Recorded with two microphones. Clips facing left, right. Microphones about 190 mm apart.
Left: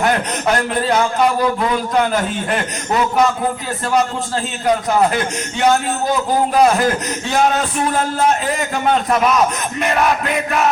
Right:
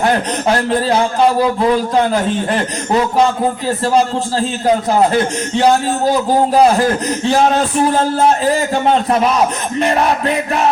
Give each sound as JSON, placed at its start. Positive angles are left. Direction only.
{"t": 0.7, "sound": "a man's voice", "side_deg": -30}
{"t": 4.6, "sound": "a man's voice", "side_deg": -30}